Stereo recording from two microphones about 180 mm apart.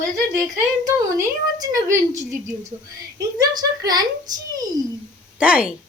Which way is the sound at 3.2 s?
20° right (ahead or behind).